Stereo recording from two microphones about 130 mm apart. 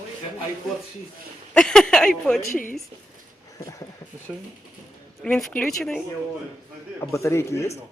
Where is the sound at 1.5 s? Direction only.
5° left (ahead or behind).